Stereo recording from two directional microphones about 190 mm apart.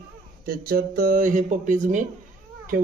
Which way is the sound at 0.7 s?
50° right (ahead or behind).